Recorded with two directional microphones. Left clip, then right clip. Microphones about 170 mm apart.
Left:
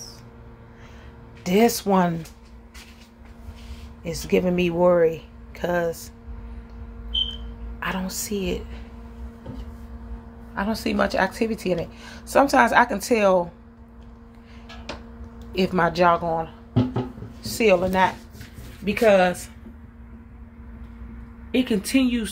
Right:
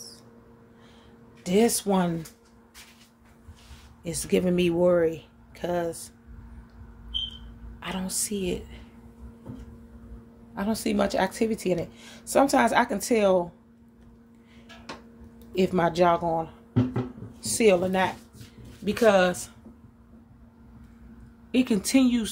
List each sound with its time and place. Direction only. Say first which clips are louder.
1.4 s speech: left 4 dB; 10° right (ahead or behind)
4.0 s speech: left 4 dB; 20° right (ahead or behind)
7.8 s speech: left 5 dB; 15° right (ahead or behind)
10.5 s speech: left 3 dB; 30° right (ahead or behind)
15.5 s a woman's voice: left 2 dB; 25° right (ahead or behind)
21.5 s speech: left 2 dB; 25° right (ahead or behind)